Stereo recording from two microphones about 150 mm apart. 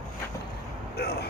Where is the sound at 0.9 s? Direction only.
90° left.